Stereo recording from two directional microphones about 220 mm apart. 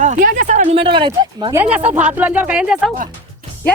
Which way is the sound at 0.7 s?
20° right (ahead or behind).